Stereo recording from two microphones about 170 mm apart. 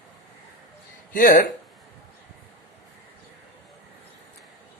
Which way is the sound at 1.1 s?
50° left (ahead or behind).